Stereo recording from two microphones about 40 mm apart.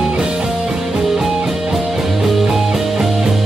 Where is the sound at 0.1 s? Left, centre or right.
Right.